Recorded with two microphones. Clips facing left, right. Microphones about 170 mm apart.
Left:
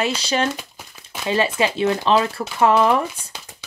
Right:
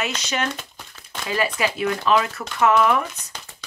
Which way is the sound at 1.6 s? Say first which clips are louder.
Left 4 dB; 25° left (ahead or behind).